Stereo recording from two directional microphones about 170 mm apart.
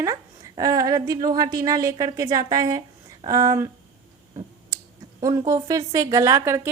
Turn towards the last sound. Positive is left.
turn(degrees=-15)  # may be behind; listen again after turning